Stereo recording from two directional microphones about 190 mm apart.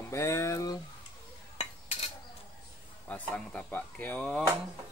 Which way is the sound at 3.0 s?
5° left (ahead or behind).